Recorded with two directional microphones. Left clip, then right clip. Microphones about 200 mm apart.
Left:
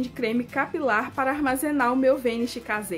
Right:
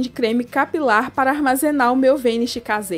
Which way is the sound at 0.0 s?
40° right (ahead or behind).